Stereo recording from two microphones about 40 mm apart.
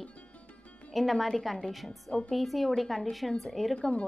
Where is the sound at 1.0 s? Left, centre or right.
Centre.